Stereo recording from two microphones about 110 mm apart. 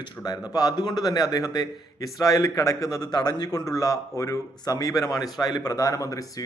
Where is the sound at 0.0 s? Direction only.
35° left (ahead or behind).